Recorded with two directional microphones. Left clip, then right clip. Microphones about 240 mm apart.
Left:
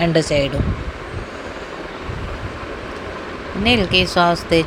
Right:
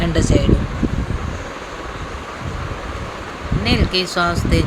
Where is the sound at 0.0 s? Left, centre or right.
Centre.